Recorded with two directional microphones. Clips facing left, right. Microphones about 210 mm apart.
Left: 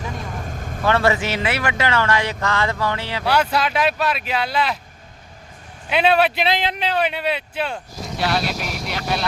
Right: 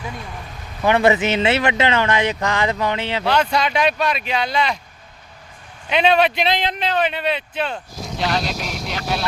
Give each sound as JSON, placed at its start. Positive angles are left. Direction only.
{"t": 0.0, "sound": "vehicle", "side_deg": 45}
{"t": 0.9, "sound": "speech", "side_deg": -20}
{"t": 3.2, "sound": "speech", "side_deg": 10}
{"t": 5.9, "sound": "speech", "side_deg": 5}